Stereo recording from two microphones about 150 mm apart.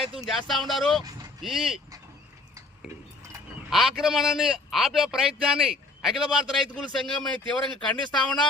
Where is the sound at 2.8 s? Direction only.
5° right (ahead or behind).